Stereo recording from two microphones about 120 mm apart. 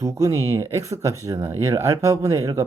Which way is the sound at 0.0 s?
25° right (ahead or behind).